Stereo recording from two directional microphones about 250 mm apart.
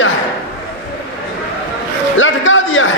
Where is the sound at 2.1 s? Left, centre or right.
Left.